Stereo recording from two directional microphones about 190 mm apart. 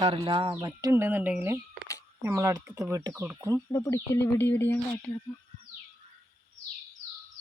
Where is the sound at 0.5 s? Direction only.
15° right (ahead or behind).